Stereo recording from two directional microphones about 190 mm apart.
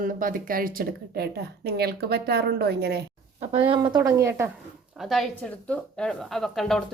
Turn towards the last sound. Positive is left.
turn(degrees=0)  # may be behind; listen again after turning